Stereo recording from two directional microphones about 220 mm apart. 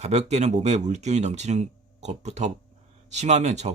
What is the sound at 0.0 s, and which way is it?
Speech, 30° right (ahead or behind).